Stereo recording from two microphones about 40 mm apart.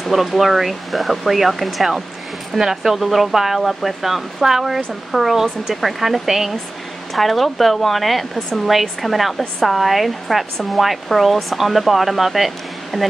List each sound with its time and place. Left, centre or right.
0.0 s speech: centre